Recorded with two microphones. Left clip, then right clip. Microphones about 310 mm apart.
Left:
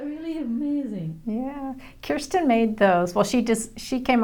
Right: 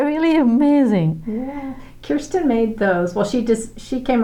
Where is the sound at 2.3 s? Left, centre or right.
Left.